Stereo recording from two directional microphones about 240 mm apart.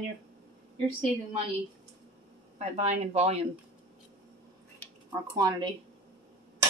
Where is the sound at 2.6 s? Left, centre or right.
Right.